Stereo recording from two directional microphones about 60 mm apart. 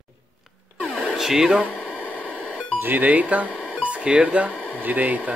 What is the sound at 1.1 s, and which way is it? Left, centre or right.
Speech, centre.